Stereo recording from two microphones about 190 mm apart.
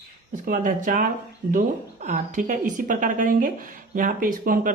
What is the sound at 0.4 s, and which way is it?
Speech, 45° right (ahead or behind).